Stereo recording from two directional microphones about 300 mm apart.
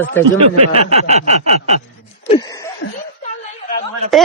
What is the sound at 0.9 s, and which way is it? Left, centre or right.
Speech, right.